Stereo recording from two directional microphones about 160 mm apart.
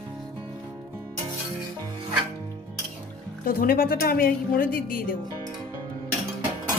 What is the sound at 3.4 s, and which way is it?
A woman's voice, 65° left (ahead or behind).